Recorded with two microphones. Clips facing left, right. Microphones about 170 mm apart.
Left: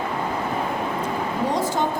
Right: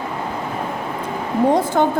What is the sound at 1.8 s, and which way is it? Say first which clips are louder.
Speech: right 7 dB; 60° right (ahead or behind).